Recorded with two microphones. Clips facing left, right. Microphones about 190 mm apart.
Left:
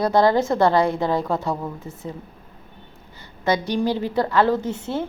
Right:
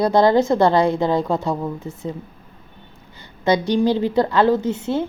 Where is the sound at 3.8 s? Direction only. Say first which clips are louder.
Right 4 dB; 20° right (ahead or behind).